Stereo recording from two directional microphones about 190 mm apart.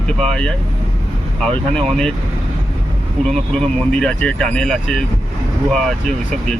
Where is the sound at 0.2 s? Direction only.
5° left (ahead or behind).